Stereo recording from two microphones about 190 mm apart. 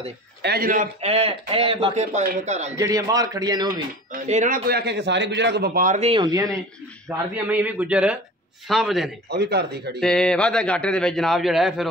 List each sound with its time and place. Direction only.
0.4 s a man's voice: 55° right (ahead or behind)
1.0 s speech: 30° right (ahead or behind)
2.8 s speech: 20° right (ahead or behind)
4.1 s a man's voice: 45° right (ahead or behind)
5.9 s speech: 30° right (ahead or behind)
6.2 s a man's voice: 20° right (ahead or behind); by 9.1 s centre (ahead or behind)
9.3 s a man's voice: 60° right (ahead or behind)
9.9 s a man's voice: 5° left (ahead or behind)